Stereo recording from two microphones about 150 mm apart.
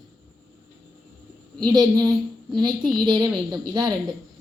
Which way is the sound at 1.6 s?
25° right (ahead or behind).